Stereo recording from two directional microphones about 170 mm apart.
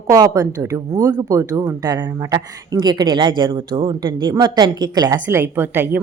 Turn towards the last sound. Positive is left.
turn(degrees=-10)  # may be behind; listen again after turning